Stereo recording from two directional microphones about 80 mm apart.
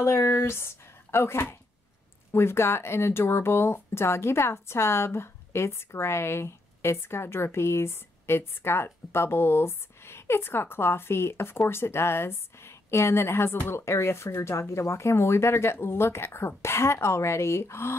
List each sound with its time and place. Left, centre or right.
0.0 s speech: left